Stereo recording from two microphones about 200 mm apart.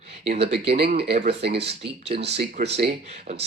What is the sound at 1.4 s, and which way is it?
Speech, 55° right (ahead or behind).